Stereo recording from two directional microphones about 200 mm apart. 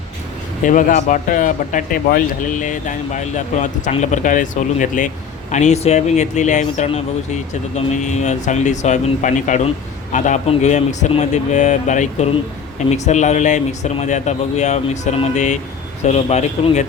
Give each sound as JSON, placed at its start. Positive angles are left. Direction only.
{"t": 0.6, "sound": "speech", "side_deg": 40}